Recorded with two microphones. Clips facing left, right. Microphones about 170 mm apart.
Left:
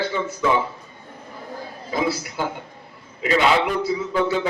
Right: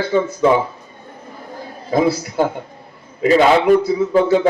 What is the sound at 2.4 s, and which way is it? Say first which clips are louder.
A man's voice: right 9 dB; 50° right (ahead or behind).